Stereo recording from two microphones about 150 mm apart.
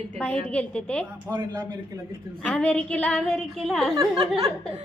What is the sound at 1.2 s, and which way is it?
Speech, 25° right (ahead or behind).